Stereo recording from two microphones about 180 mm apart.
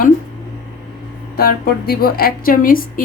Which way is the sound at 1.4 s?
55° left (ahead or behind).